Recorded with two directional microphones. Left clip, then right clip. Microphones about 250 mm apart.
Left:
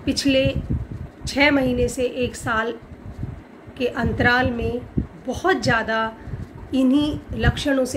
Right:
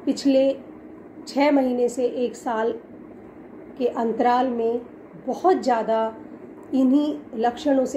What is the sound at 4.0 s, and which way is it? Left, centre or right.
A woman's voice, centre.